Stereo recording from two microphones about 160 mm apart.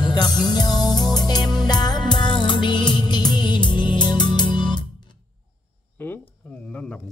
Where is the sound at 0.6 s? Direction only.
25° left (ahead or behind).